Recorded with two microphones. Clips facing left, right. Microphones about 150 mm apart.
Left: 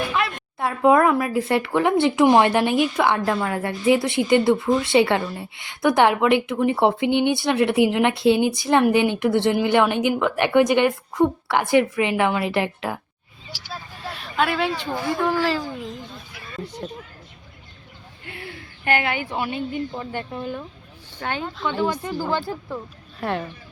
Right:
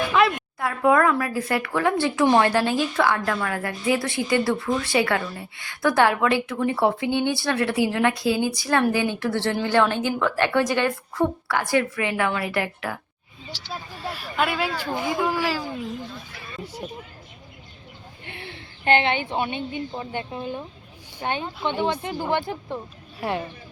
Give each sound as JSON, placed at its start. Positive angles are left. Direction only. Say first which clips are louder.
{"t": 0.1, "sound": "a sound", "louder": "right 7 dB", "side_deg": -90}
{"t": 0.6, "sound": "speech", "louder": "left 3 dB", "side_deg": 25}
{"t": 13.5, "sound": "speech", "louder": "even", "side_deg": 10}
{"t": 14.0, "sound": "speech", "louder": "left 2 dB", "side_deg": -5}
{"t": 14.9, "sound": "speech", "louder": "left 1 dB", "side_deg": -20}
{"t": 15.2, "sound": "speech", "louder": "left 5 dB", "side_deg": -5}
{"t": 18.3, "sound": "a woman's voice", "louder": "left 3 dB", "side_deg": -25}